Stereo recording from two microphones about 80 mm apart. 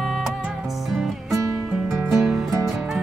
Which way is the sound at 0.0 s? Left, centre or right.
Centre.